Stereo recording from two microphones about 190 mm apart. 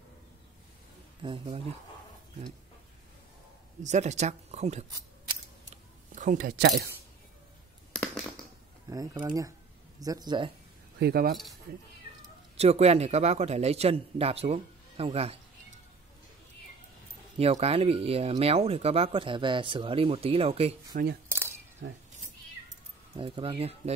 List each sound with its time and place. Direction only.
1.2 s speech: 30° right (ahead or behind)
3.8 s speech: 40° right (ahead or behind)
6.1 s speech: 45° right (ahead or behind)
7.9 s a sound: 5° left (ahead or behind)
8.9 s speech: 20° right (ahead or behind)
11.0 s speech: 55° right (ahead or behind)
12.5 s speech: 35° right (ahead or behind)
17.4 s speech: 35° right (ahead or behind)
20.9 s speech: 55° right (ahead or behind)
21.3 s camera: 10° right (ahead or behind)
21.8 s speech: 70° right (ahead or behind)
23.1 s speech: 25° right (ahead or behind)